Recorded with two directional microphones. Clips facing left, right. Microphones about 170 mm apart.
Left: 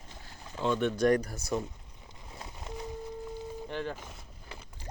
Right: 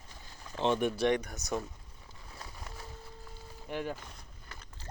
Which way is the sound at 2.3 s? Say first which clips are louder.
Left 6 dB; 20° left (ahead or behind).